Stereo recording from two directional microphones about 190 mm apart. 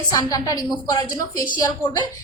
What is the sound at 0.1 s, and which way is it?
A woman's voice, 20° left (ahead or behind).